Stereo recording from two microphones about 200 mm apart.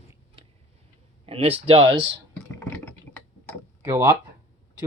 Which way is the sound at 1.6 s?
30° right (ahead or behind).